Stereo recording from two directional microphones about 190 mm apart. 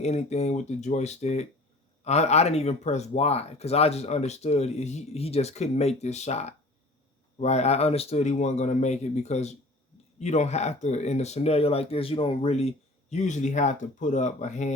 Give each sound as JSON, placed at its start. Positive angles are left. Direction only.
{"t": 0.0, "sound": "speech", "side_deg": 35}